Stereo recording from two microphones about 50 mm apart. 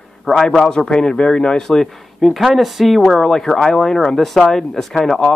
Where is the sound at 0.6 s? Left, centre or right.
Centre.